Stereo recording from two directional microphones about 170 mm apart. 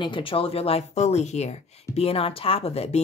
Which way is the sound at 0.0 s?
30° left (ahead or behind).